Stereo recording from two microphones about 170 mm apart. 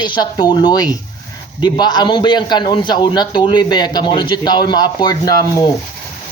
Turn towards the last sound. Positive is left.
turn(degrees=25)  # may be behind; listen again after turning